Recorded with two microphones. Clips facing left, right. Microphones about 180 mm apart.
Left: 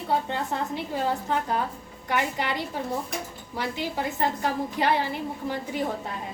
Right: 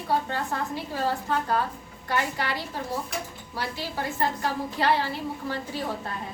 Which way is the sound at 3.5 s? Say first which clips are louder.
Left 3 dB; 20° left (ahead or behind).